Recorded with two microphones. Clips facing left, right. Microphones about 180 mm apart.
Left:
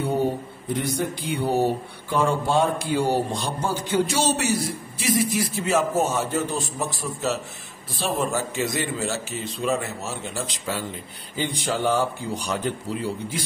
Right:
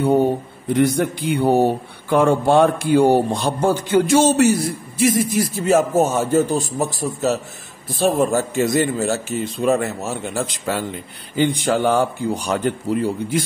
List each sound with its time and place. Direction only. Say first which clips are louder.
0.7 s a man's voice: right 10 dB; 60° right (ahead or behind)